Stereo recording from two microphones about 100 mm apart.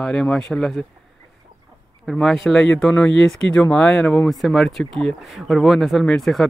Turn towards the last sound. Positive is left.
turn(degrees=0)  # may be behind; listen again after turning